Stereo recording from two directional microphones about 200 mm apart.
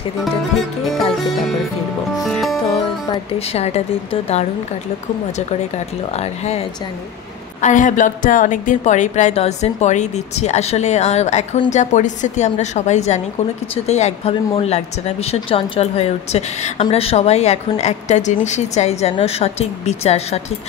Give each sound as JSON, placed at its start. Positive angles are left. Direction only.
{"t": 2.4, "sound": "music", "side_deg": 0}
{"t": 3.1, "sound": "a woman's voice", "side_deg": 30}
{"t": 6.1, "sound": "a woman's voice", "side_deg": 35}
{"t": 7.6, "sound": "a woman's voice", "side_deg": 40}